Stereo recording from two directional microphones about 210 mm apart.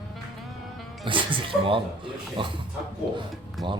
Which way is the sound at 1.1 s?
25° right (ahead or behind).